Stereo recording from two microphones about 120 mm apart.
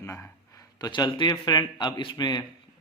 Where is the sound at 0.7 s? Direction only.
35° left (ahead or behind).